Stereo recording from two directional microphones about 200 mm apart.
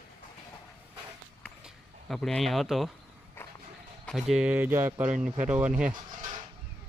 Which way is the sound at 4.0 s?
Centre (ahead or behind).